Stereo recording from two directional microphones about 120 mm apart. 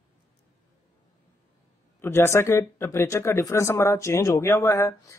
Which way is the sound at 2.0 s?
20° left (ahead or behind).